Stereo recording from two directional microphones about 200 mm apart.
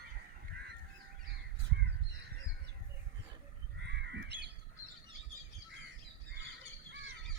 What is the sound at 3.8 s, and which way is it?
Bird, 60° right (ahead or behind).